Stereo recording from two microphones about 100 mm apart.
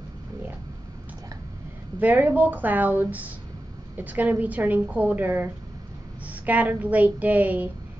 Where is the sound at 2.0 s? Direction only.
15° right (ahead or behind).